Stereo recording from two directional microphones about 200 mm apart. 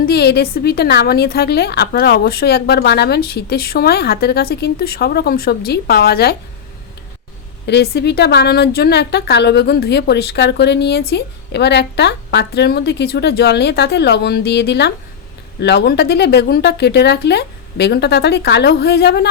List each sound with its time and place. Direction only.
0.0 s a woman's voice: 55° left (ahead or behind)
7.7 s a woman's voice: 55° left (ahead or behind)